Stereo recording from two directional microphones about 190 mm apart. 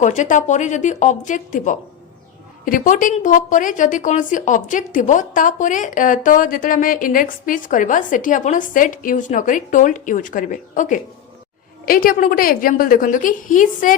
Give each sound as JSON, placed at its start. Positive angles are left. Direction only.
{"t": 0.0, "sound": "a woman's voice", "side_deg": 40}